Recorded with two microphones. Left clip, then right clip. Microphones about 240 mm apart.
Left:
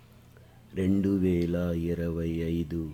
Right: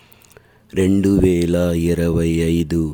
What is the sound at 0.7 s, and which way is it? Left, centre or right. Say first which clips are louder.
Speech: right 12 dB; right.